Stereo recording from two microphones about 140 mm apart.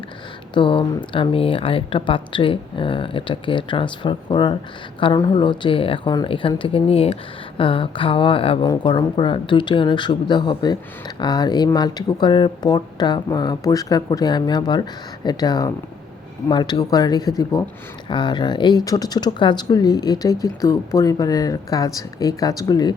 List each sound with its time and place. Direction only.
0.5 s speech: 35° left (ahead or behind)